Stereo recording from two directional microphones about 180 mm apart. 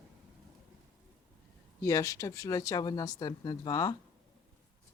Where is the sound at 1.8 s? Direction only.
20° left (ahead or behind).